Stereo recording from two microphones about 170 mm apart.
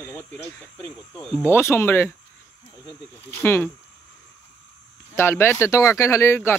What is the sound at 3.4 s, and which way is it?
Speech, 15° left (ahead or behind).